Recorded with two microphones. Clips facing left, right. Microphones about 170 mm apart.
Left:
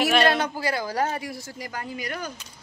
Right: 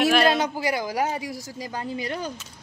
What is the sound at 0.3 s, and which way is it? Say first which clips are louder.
A man's voice: right 1 dB; 15° right (ahead or behind).